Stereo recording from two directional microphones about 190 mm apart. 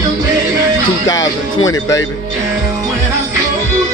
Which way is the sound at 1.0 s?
20° left (ahead or behind).